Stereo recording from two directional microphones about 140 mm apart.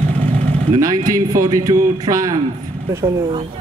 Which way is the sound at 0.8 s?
25° right (ahead or behind).